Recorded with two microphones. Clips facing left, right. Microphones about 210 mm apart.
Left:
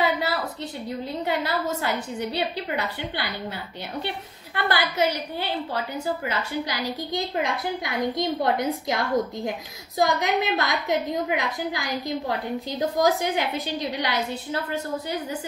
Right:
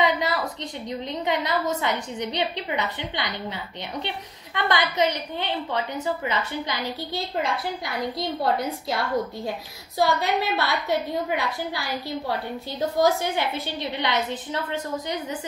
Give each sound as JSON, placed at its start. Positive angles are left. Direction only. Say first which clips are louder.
{"t": 0.0, "sound": "a woman's voice", "louder": "right 1 dB", "side_deg": 5}
{"t": 9.9, "sound": "a woman's voice", "louder": "even", "side_deg": 15}